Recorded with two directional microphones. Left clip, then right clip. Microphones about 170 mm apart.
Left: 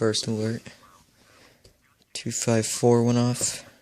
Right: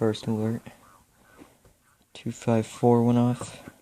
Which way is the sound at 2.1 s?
40° left (ahead or behind).